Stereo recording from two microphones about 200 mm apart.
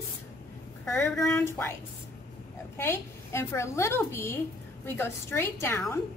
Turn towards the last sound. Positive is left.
turn(degrees=10)  # may be behind; listen again after turning